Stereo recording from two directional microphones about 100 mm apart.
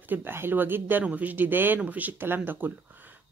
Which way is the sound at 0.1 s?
20° right (ahead or behind).